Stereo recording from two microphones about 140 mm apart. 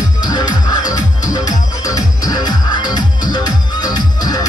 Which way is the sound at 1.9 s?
25° left (ahead or behind).